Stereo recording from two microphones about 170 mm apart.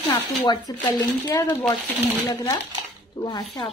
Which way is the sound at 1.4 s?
10° left (ahead or behind).